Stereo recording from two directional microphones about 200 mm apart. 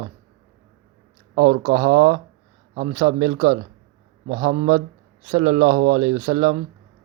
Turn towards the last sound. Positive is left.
turn(degrees=-35)  # may be behind; listen again after turning